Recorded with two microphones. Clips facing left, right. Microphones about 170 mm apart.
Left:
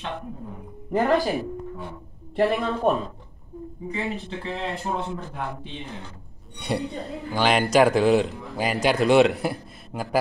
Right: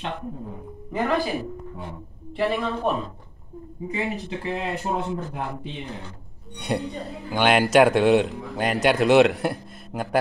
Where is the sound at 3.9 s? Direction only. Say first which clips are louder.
Right 2 dB; 15° right (ahead or behind).